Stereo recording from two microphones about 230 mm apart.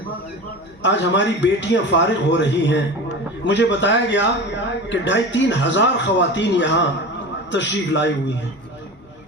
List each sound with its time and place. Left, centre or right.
0.8 s a man's voice: left